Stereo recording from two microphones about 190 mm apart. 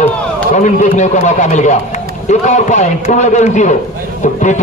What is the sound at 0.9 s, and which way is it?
Speech, 40° left (ahead or behind).